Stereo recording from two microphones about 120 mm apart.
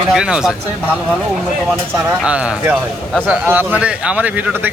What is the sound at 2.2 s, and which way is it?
A man's voice, 10° right (ahead or behind).